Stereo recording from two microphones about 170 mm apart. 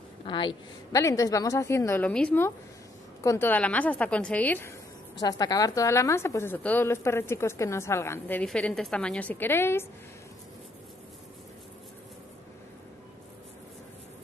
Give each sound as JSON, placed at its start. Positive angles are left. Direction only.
{"t": 0.2, "sound": "a woman's voice", "side_deg": 30}
{"t": 5.2, "sound": "a woman's voice", "side_deg": 20}